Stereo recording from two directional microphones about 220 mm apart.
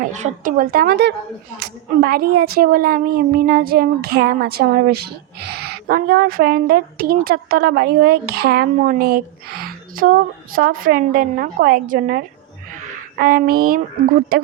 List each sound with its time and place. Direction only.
0.0 s a woman's voice: 35° right (ahead or behind)